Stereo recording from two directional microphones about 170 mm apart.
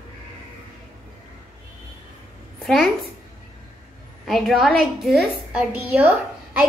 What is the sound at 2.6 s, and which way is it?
Speech, centre (ahead or behind).